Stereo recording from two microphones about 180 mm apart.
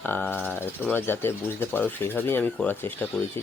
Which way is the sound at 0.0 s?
10° left (ahead or behind).